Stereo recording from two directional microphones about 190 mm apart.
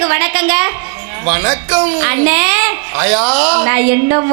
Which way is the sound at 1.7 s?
15° right (ahead or behind).